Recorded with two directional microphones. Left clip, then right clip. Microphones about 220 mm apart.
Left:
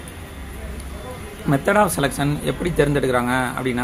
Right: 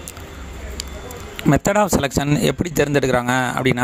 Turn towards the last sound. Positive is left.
turn(degrees=-50)  # may be behind; listen again after turning